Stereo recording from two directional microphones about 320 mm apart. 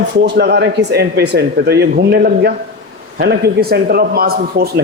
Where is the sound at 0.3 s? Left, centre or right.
Right.